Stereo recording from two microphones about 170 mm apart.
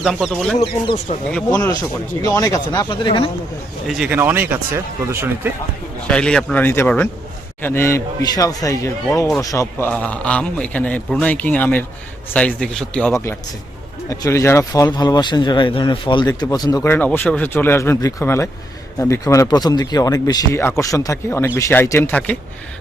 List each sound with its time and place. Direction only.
0.0 s speech: centre (ahead or behind)
1.5 s speech: 20° left (ahead or behind)
3.8 s speech: 5° right (ahead or behind)
6.1 s a man's voice: 5° left (ahead or behind)